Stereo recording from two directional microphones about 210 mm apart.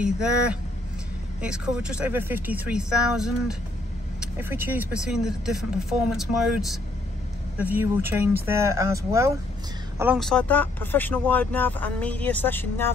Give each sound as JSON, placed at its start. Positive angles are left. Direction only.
{"t": 0.0, "sound": "speech", "side_deg": -5}
{"t": 10.1, "sound": "speech", "side_deg": 5}